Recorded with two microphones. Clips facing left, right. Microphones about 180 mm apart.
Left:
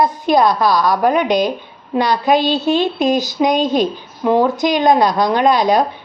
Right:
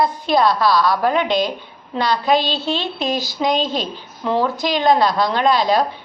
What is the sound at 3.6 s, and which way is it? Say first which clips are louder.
Speech: left 7 dB; 50° left (ahead or behind).